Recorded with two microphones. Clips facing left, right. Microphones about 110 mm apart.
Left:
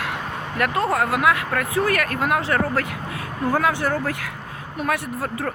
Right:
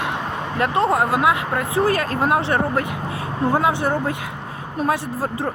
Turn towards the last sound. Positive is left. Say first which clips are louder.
# right 2 dB
turn(degrees=-25)  # may be behind; listen again after turning